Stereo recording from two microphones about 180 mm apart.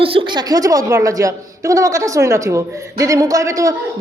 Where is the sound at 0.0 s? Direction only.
30° right (ahead or behind).